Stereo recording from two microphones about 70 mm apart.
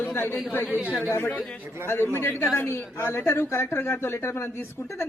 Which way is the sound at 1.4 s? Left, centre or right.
Centre.